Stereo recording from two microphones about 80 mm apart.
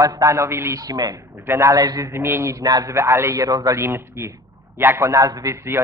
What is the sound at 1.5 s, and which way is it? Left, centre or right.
Speech, right.